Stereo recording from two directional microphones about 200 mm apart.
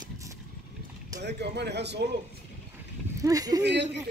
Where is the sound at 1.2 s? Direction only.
55° right (ahead or behind).